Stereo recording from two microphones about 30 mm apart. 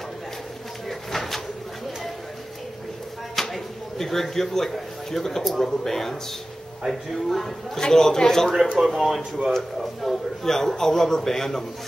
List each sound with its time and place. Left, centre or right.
0.8 s bird: centre
3.3 s a sound: centre
5.6 s a man's voice: centre
8.9 s a man's voice: centre